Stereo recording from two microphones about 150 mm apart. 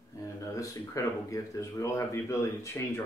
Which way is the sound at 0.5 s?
20° left (ahead or behind).